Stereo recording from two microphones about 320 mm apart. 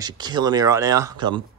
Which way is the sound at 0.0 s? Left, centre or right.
Centre.